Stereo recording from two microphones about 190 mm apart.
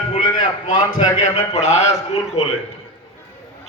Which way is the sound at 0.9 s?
35° left (ahead or behind).